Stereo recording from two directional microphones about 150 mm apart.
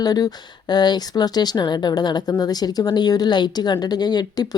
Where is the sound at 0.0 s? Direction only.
25° left (ahead or behind).